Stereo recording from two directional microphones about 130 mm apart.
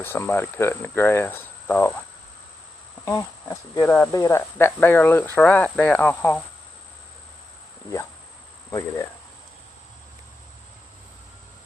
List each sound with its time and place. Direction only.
0.0 s speech: 20° left (ahead or behind)
3.1 s speech: 25° left (ahead or behind)